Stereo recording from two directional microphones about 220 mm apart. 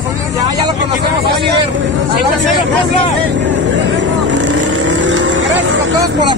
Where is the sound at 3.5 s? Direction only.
55° right (ahead or behind).